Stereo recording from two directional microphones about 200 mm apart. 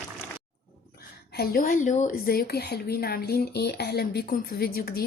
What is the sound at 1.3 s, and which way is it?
A woman's voice, 50° left (ahead or behind).